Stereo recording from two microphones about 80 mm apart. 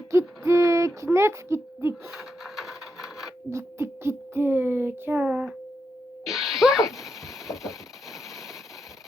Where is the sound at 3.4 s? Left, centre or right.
Right.